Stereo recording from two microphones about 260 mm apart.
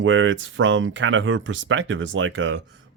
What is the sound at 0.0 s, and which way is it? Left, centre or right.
Speech, right.